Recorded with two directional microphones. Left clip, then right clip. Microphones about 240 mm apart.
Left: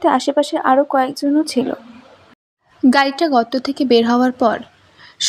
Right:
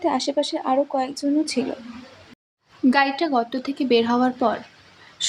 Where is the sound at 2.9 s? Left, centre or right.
Left.